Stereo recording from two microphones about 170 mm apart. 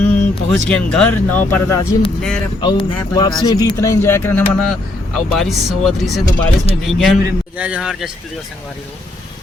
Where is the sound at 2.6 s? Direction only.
30° left (ahead or behind); by 4.4 s 15° left (ahead or behind).